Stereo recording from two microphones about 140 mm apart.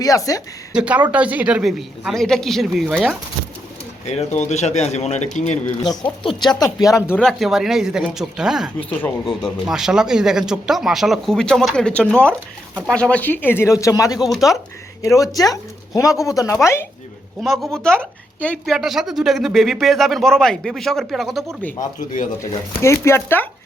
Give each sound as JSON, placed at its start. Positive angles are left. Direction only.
{"t": 0.0, "sound": "speech", "side_deg": 25}
{"t": 0.7, "sound": "speech", "side_deg": -10}
{"t": 4.0, "sound": "speech", "side_deg": 50}
{"t": 5.8, "sound": "speech", "side_deg": 30}
{"t": 7.2, "sound": "speech", "side_deg": 0}
{"t": 8.8, "sound": "speech", "side_deg": 10}
{"t": 9.4, "sound": "speech", "side_deg": -5}
{"t": 14.3, "sound": "speech", "side_deg": 0}
{"t": 15.0, "sound": "speech", "side_deg": 25}
{"t": 17.4, "sound": "speech", "side_deg": 0}
{"t": 21.8, "sound": "speech", "side_deg": 60}
{"t": 22.4, "sound": "speech", "side_deg": 20}